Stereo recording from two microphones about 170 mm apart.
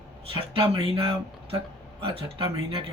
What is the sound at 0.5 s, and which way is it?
Speech, 30° right (ahead or behind).